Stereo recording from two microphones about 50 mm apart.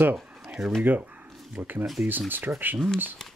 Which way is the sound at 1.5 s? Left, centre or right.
Right.